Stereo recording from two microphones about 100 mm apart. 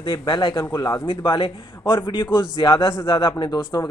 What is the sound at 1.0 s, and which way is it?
A man's voice, 55° left (ahead or behind).